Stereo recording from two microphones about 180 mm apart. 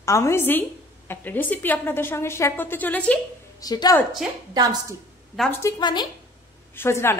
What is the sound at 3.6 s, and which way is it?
Speech, 20° left (ahead or behind).